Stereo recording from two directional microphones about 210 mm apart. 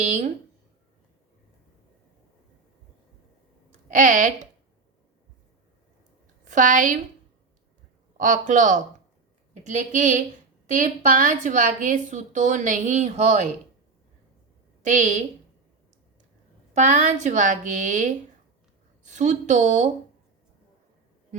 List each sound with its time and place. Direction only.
0.0 s a woman's voice: 30° right (ahead or behind)
3.9 s a woman's voice: 35° right (ahead or behind)
6.4 s a woman's voice: 35° right (ahead or behind)
8.2 s a woman's voice: 35° right (ahead or behind)
14.8 s a woman's voice: 35° right (ahead or behind)
16.7 s a woman's voice: 35° right (ahead or behind)